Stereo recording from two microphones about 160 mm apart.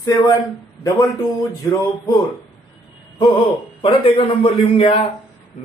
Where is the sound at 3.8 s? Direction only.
30° left (ahead or behind).